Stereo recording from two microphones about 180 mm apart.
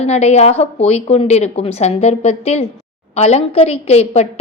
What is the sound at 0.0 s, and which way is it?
A woman's voice, 35° left (ahead or behind).